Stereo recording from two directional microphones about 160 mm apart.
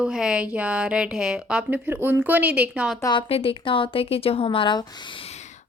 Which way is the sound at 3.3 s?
35° left (ahead or behind).